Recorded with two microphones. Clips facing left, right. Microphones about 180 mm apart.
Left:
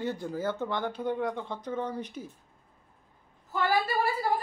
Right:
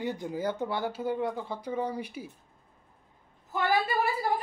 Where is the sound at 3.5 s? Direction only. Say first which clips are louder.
Even; 20° right (ahead or behind).